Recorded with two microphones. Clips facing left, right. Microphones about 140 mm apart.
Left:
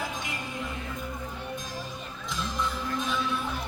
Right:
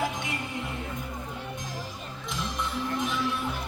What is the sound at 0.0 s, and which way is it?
Music, 20° right (ahead or behind).